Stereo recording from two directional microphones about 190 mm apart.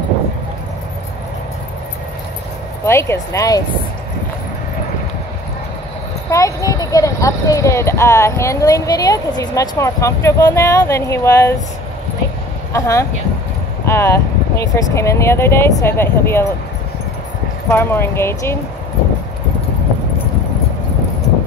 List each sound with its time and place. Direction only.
2.8 s a child's voice: 15° left (ahead or behind)
6.3 s a child's voice: 20° left (ahead or behind)
12.7 s a child's voice: 15° left (ahead or behind)
17.6 s a child's voice: 10° left (ahead or behind)